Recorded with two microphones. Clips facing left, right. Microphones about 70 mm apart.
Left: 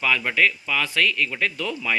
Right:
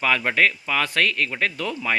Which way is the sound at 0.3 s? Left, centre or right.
Right.